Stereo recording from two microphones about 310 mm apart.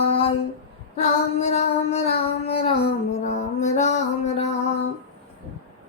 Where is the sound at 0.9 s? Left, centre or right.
Left.